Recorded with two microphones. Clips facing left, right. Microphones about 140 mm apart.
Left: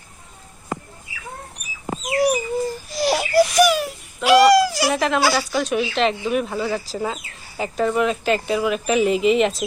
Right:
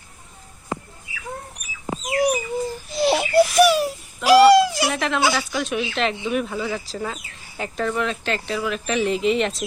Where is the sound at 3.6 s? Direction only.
35° right (ahead or behind).